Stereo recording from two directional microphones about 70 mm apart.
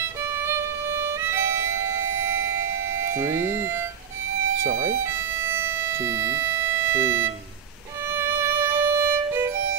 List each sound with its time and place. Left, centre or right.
0.5 s music: right
3.2 s speech: right
5.4 s music: right
8.1 s violin: right